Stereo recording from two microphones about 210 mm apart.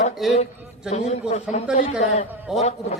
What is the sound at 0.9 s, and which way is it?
A man's voice, 30° left (ahead or behind).